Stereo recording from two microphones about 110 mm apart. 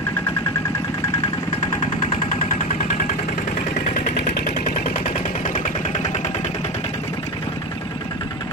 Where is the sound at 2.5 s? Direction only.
80° left.